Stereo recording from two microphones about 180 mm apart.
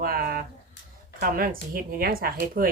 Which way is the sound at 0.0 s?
55° right (ahead or behind).